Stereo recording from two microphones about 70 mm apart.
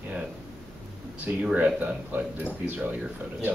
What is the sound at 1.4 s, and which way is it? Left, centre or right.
Speech, centre.